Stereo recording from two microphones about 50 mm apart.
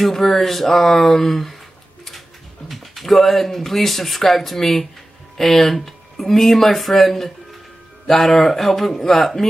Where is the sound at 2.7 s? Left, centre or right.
Centre.